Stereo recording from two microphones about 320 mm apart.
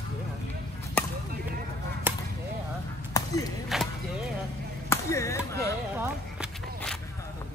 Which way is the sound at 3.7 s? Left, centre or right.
Centre.